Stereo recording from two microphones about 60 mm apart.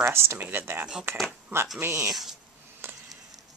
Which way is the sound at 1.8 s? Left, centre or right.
Right.